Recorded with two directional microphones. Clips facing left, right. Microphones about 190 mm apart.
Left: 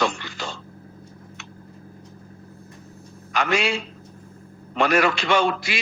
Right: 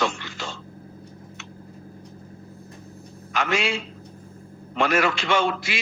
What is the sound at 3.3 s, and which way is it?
A man's voice, 35° left (ahead or behind).